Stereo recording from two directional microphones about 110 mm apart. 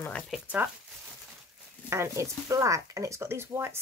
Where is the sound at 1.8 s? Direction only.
25° right (ahead or behind).